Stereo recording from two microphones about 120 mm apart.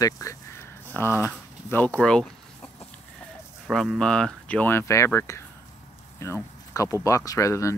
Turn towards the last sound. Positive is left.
turn(degrees=25)  # may be behind; listen again after turning